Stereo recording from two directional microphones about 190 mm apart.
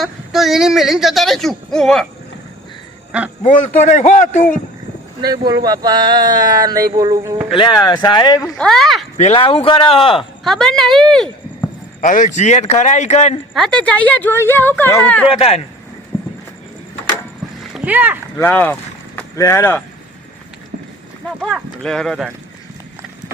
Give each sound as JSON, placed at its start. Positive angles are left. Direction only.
{"t": 0.0, "sound": "speech", "side_deg": 0}
{"t": 3.4, "sound": "a man's voice", "side_deg": 40}
{"t": 5.2, "sound": "speech", "side_deg": -20}
{"t": 7.5, "sound": "speech", "side_deg": 25}
{"t": 8.5, "sound": "speech", "side_deg": 5}
{"t": 9.1, "sound": "speech", "side_deg": 30}
{"t": 10.4, "sound": "speech", "side_deg": 0}
{"t": 11.9, "sound": "a man's voice", "side_deg": 40}
{"t": 13.5, "sound": "speech", "side_deg": 5}
{"t": 15.3, "sound": "a man's voice", "side_deg": 30}
{"t": 16.1, "sound": "clip-clop", "side_deg": 15}
{"t": 17.7, "sound": "speech", "side_deg": -10}
{"t": 18.3, "sound": "speech", "side_deg": 10}
{"t": 21.4, "sound": "speech", "side_deg": 0}